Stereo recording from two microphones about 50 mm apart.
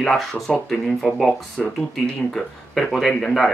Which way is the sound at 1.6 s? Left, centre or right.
Centre.